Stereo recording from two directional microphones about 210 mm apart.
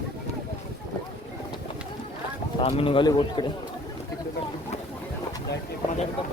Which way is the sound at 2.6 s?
25° left (ahead or behind).